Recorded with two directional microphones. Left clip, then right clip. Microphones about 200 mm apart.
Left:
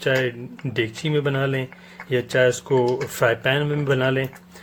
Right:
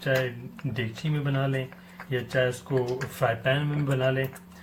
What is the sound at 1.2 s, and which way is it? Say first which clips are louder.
Speech: left 2 dB; 50° left (ahead or behind).